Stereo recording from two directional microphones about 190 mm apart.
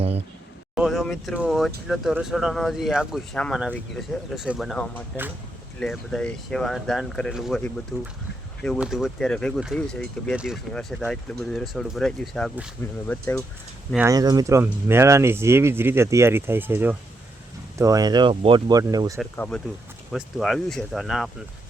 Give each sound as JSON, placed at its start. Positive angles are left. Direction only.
{"t": 0.8, "sound": "speech", "side_deg": 0}
{"t": 12.8, "sound": "speech", "side_deg": 15}
{"t": 14.1, "sound": "speech", "side_deg": -20}
{"t": 19.2, "sound": "speech", "side_deg": 5}